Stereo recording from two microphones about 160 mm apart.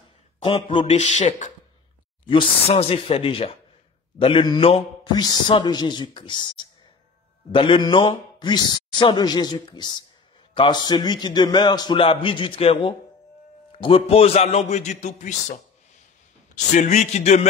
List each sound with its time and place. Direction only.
0.4 s speech: 35° left (ahead or behind)
2.2 s a man's voice: 35° left (ahead or behind)